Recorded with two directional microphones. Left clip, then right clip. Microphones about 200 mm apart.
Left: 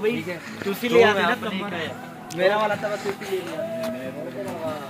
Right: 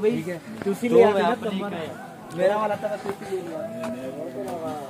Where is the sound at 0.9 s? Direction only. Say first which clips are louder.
Even; 25° right (ahead or behind).